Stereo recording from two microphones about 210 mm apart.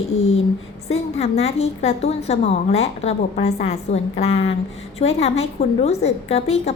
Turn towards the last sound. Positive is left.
turn(degrees=30)  # may be behind; listen again after turning